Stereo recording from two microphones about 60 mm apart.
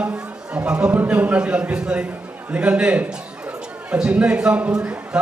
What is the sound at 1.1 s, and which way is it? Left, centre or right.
A man's voice, right.